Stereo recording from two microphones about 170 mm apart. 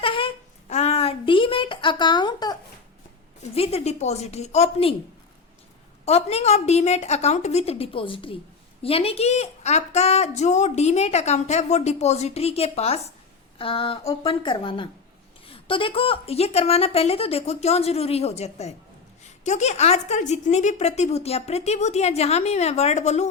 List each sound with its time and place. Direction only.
0.0 s a sound: 30° left (ahead or behind)
3.5 s a woman's voice: 35° left (ahead or behind)
6.1 s a woman's voice: 40° left (ahead or behind)